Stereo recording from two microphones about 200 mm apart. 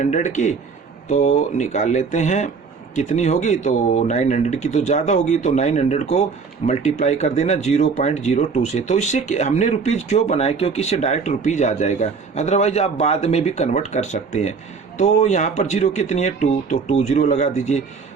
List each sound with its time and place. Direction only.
0.0 s speech: 35° left (ahead or behind)